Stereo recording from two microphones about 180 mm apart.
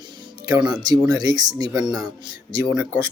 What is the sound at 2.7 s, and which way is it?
Speech, 5° left (ahead or behind).